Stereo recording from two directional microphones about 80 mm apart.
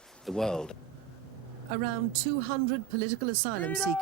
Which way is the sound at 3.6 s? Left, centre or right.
Centre.